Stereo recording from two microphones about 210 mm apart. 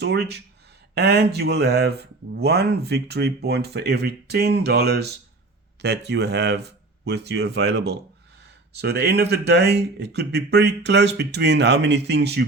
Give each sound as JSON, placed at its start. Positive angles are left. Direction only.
{"t": 0.0, "sound": "speech", "side_deg": -50}